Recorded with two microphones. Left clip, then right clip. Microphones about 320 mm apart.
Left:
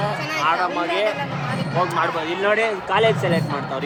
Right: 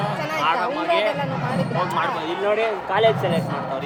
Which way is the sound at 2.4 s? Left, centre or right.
Left.